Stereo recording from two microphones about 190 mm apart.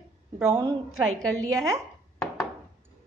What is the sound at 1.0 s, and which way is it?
Speech, 5° left (ahead or behind).